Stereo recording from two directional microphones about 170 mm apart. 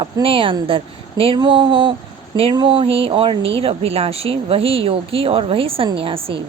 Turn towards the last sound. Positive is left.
turn(degrees=-30)  # may be behind; listen again after turning